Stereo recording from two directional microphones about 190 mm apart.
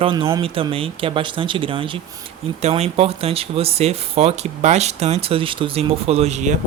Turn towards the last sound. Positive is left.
turn(degrees=-40)  # may be behind; listen again after turning